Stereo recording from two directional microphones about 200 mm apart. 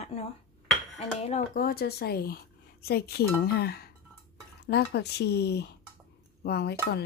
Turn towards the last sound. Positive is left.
turn(degrees=55)  # may be behind; listen again after turning